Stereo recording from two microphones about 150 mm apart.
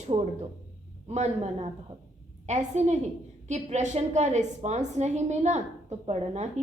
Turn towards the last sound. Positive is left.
turn(degrees=-45)  # may be behind; listen again after turning